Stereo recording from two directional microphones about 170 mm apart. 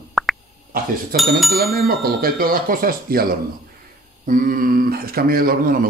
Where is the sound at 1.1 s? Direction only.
60° right (ahead or behind).